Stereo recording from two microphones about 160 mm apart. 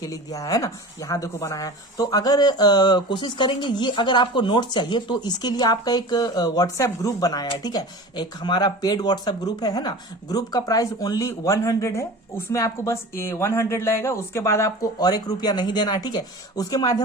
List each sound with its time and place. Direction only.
0.0 s speech: 20° left (ahead or behind)